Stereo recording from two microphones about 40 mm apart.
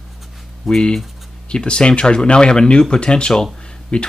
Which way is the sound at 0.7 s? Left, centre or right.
Centre.